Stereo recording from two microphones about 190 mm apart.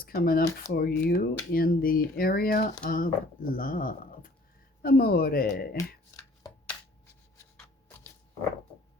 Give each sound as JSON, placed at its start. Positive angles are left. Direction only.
{"t": 0.0, "sound": "speech", "side_deg": 50}
{"t": 6.1, "sound": "shuffling cards", "side_deg": 15}